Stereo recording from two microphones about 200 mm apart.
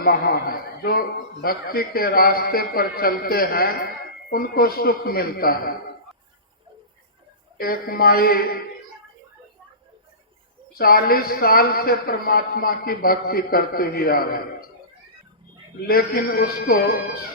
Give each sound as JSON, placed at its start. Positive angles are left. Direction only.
{"t": 0.0, "sound": "a man's voice", "side_deg": 50}
{"t": 7.6, "sound": "a man's voice", "side_deg": 50}
{"t": 10.8, "sound": "a man's voice", "side_deg": 50}
{"t": 15.9, "sound": "a man's voice", "side_deg": 50}